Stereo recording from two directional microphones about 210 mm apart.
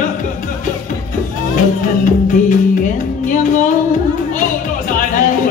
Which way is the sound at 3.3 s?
40° left (ahead or behind).